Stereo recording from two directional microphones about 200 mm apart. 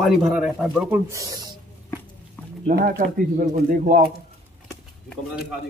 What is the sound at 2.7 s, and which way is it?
Speech, 45° right (ahead or behind).